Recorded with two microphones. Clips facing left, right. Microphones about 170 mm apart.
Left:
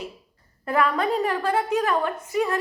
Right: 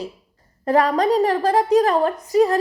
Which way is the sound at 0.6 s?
40° right (ahead or behind).